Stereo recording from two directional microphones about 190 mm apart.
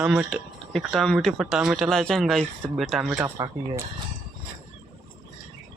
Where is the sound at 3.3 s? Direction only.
20° right (ahead or behind).